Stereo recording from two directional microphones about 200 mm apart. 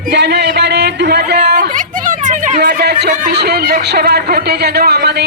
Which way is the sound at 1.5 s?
40° right (ahead or behind).